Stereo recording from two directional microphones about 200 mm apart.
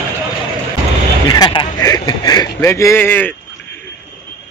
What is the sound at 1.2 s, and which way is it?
Speech, 20° left (ahead or behind).